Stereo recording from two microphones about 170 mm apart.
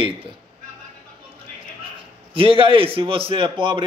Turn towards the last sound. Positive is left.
turn(degrees=-30)  # may be behind; listen again after turning